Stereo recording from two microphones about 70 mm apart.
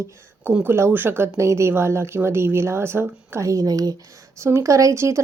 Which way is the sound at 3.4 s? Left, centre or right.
Right.